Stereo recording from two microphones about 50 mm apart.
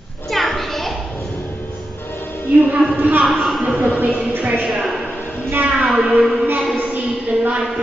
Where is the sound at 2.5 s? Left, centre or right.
Right.